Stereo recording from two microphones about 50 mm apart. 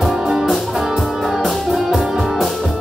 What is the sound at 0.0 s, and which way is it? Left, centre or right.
Music, centre.